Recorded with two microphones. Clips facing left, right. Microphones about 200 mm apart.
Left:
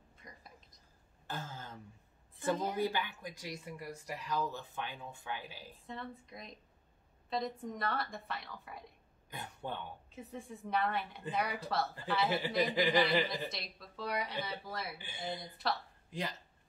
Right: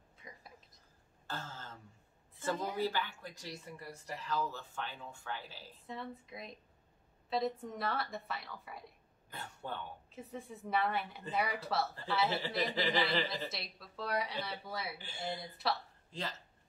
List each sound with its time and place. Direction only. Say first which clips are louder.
0.2 s a sound: right 1 dB; 5° right (ahead or behind)
1.2 s a sound: left 1 dB; 15° left (ahead or behind)
2.8 s speech: left 1 dB; 15° left (ahead or behind)
5.9 s a woman's voice: right 1 dB; 5° right (ahead or behind)
9.3 s throat clearing: left 2 dB; 15° left (ahead or behind)
10.1 s a woman's voice: even; centre (ahead or behind)
12.3 s speech: left 3 dB; 15° left (ahead or behind)
13.5 s a woman's voice: even; centre (ahead or behind)
15.0 s speech: even; 15° left (ahead or behind)
15.4 s a woman's voice: right 1 dB; centre (ahead or behind)
16.1 s speech: left 2 dB; 15° left (ahead or behind)